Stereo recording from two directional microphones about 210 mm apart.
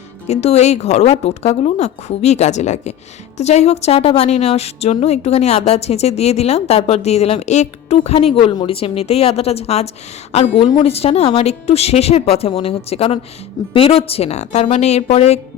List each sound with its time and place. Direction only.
0.3 s a woman's voice: 30° left (ahead or behind)